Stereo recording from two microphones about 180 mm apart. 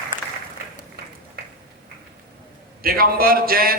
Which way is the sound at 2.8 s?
55° right (ahead or behind).